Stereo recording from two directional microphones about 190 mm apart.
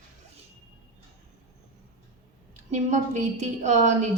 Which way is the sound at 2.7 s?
40° right (ahead or behind).